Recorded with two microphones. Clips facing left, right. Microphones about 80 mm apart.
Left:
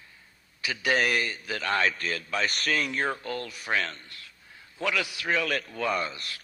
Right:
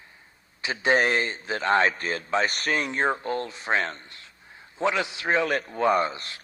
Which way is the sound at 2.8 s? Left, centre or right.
Right.